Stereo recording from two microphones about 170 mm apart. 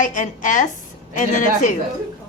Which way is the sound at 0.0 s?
50° left (ahead or behind).